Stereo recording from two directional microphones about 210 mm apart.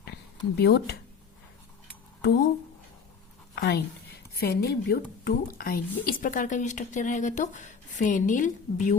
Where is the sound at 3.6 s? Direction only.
50° left (ahead or behind).